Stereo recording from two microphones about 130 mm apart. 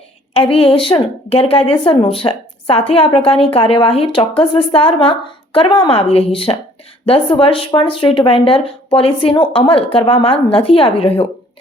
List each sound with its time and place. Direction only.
0.3 s a woman's voice: 45° left (ahead or behind)